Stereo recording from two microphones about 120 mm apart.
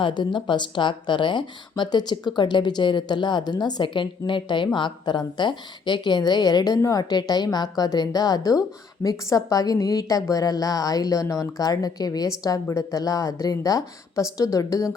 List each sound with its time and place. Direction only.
0.0 s a woman's voice: 40° left (ahead or behind)